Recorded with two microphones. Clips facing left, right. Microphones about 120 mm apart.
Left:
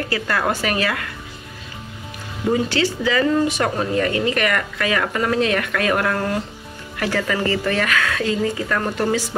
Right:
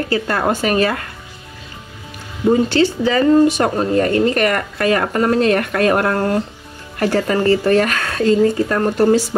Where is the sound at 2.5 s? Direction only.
30° right (ahead or behind).